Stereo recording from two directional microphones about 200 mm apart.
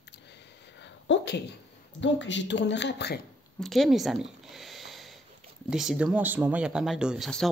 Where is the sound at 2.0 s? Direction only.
65° left (ahead or behind).